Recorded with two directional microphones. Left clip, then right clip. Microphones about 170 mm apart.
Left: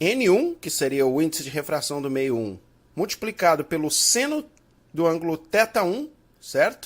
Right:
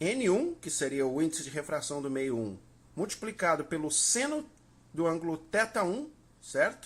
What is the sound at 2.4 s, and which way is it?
Speech, 25° left (ahead or behind).